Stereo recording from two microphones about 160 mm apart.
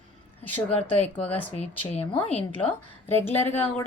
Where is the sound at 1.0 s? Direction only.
40° left (ahead or behind).